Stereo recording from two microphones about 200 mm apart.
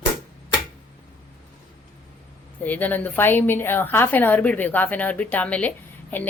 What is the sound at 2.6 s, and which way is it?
A woman's voice, 10° left (ahead or behind).